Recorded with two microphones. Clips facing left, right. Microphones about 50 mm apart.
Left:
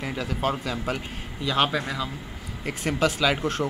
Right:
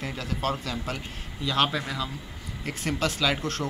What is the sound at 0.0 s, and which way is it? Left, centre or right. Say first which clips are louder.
A man's voice: left 3 dB; centre.